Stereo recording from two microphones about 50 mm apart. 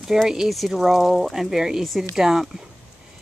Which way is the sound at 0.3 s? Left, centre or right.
Centre.